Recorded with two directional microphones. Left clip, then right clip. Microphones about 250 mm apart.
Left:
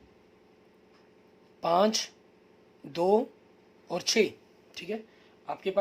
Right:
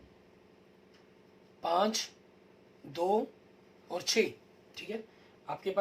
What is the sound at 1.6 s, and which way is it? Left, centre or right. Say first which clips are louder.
Speech: left 5 dB; left.